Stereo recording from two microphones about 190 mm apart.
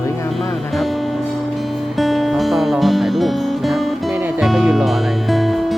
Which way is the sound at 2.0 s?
Centre (ahead or behind).